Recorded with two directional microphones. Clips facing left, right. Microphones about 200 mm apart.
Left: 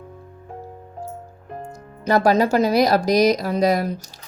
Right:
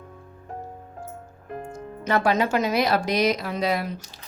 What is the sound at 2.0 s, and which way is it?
A woman's voice, 40° left (ahead or behind).